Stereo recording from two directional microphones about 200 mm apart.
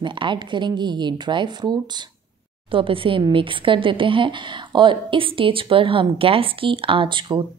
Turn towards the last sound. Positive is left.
turn(degrees=-25)  # may be behind; listen again after turning